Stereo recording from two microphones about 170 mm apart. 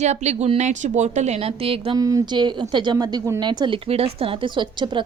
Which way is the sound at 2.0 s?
20° right (ahead or behind).